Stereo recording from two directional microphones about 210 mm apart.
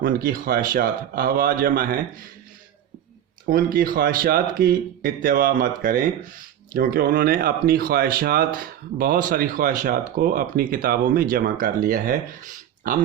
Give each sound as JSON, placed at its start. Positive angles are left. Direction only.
{"t": 0.0, "sound": "speech", "side_deg": -45}
{"t": 3.5, "sound": "speech", "side_deg": -40}